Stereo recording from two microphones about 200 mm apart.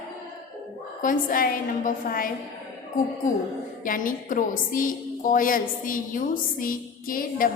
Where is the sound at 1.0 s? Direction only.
40° left (ahead or behind).